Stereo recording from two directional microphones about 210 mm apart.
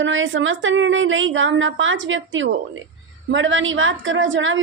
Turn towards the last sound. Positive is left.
turn(degrees=-65)  # may be behind; listen again after turning